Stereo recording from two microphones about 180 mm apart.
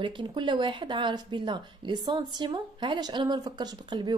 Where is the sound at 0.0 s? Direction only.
25° right (ahead or behind).